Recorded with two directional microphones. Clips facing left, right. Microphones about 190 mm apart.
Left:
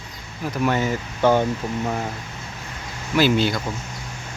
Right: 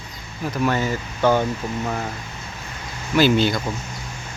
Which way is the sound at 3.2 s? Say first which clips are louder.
Right 2 dB; 5° left (ahead or behind).